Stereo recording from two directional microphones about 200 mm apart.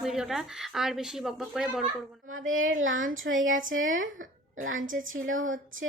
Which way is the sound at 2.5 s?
80° right.